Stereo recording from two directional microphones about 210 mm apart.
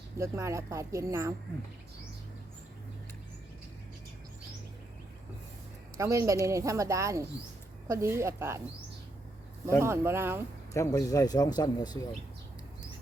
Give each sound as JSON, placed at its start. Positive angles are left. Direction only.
{"t": 0.2, "sound": "speech", "side_deg": -15}
{"t": 6.0, "sound": "speech", "side_deg": -15}
{"t": 9.8, "sound": "speech", "side_deg": -10}
{"t": 10.8, "sound": "speech", "side_deg": 15}